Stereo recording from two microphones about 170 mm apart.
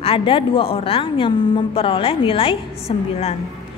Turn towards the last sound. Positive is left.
turn(degrees=35)  # may be behind; listen again after turning